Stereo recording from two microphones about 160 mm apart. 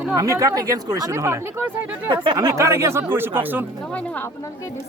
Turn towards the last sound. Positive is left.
turn(degrees=-10)  # may be behind; listen again after turning